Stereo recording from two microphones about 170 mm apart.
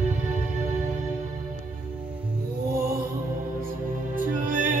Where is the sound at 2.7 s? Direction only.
60° right (ahead or behind).